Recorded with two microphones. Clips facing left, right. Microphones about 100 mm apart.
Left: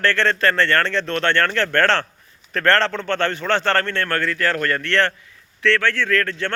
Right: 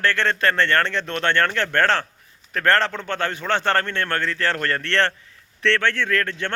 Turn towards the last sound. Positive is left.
turn(degrees=-20)  # may be behind; listen again after turning